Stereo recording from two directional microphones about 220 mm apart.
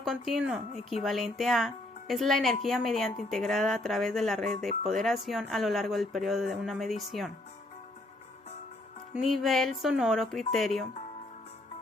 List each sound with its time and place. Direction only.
0.0 s speech: centre (ahead or behind)
9.1 s speech: centre (ahead or behind)